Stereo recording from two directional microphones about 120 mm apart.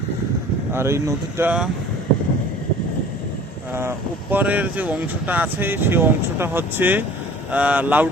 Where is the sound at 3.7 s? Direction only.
20° right (ahead or behind).